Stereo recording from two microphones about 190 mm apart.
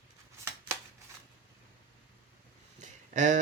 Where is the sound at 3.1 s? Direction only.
40° right (ahead or behind).